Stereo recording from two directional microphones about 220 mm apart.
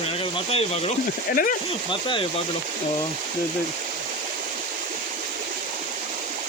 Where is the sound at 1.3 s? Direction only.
40° left (ahead or behind).